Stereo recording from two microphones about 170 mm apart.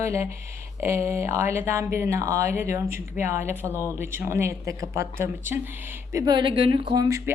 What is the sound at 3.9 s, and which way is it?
Speech, 15° right (ahead or behind).